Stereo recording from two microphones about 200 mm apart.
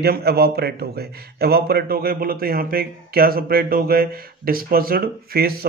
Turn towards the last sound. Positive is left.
turn(degrees=-50)  # may be behind; listen again after turning